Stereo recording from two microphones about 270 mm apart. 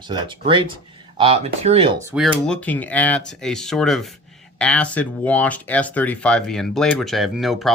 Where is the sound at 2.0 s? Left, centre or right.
Centre.